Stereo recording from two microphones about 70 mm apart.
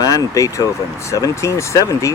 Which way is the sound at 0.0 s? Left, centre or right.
Left.